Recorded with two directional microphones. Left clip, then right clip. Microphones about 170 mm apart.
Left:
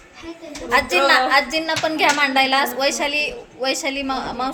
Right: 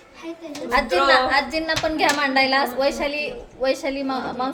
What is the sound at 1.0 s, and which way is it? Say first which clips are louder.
A woman's voice: left 2 dB; 25° left (ahead or behind).